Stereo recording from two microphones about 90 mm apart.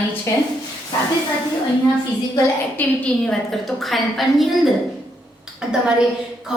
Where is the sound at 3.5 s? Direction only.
Centre (ahead or behind).